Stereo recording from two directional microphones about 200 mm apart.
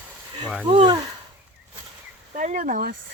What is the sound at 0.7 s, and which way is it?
Speech, 30° right (ahead or behind).